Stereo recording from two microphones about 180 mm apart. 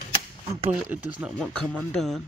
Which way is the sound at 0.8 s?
5° right (ahead or behind).